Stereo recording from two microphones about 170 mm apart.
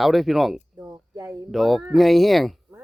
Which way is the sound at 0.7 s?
15° right (ahead or behind).